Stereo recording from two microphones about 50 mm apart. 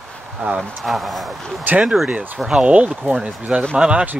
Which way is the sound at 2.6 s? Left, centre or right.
Right.